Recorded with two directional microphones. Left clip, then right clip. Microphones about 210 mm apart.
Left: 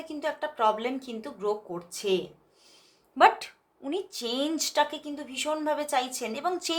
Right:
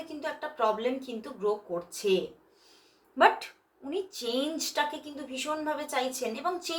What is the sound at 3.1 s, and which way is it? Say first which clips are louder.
A woman's voice: left 2 dB; 35° left (ahead or behind).